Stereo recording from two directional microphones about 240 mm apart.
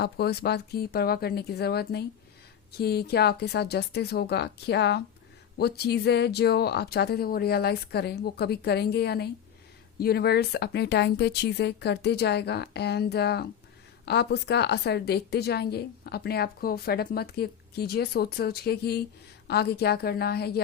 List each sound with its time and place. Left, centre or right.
0.0 s a woman's voice: left